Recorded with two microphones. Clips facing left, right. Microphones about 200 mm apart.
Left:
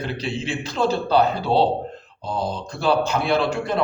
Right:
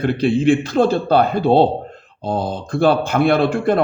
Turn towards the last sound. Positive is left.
turn(degrees=-55)  # may be behind; listen again after turning